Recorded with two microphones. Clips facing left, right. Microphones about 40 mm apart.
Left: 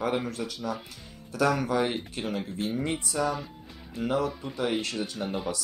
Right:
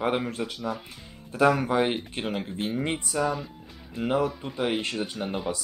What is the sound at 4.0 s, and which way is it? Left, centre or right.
Speech, right.